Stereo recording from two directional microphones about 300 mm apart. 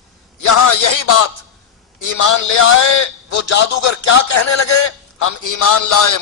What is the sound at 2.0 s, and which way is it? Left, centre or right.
Speech, left.